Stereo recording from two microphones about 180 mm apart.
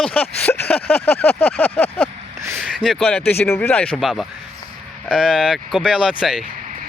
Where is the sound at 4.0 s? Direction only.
Centre (ahead or behind).